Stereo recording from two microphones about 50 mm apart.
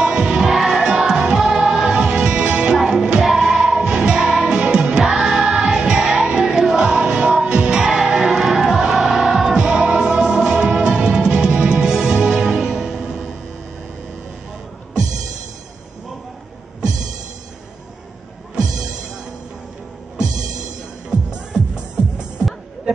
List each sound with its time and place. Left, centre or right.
0.0 s music: centre